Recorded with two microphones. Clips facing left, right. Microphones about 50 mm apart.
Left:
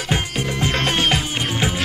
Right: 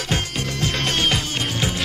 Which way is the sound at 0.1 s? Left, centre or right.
Centre.